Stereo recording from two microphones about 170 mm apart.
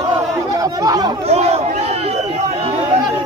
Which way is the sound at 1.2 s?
40° right (ahead or behind).